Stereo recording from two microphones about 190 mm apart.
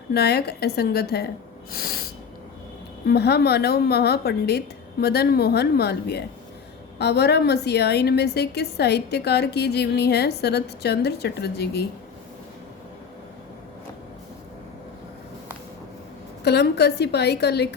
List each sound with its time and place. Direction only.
0.1 s a woman's voice: 55° left (ahead or behind)
1.7 s snort: 55° left (ahead or behind)
3.1 s a woman's voice: 55° left (ahead or behind)
16.4 s a woman's voice: 60° left (ahead or behind)